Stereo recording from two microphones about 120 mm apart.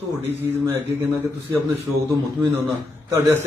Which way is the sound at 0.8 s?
15° right (ahead or behind).